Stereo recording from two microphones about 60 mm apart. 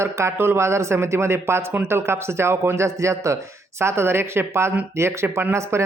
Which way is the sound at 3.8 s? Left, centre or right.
Right.